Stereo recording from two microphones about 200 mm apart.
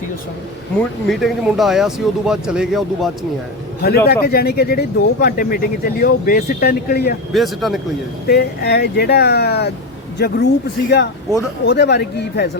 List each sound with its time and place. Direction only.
1.0 s speech: centre (ahead or behind)
3.8 s speech: 50° left (ahead or behind)
7.3 s speech: centre (ahead or behind)
8.3 s speech: 55° left (ahead or behind)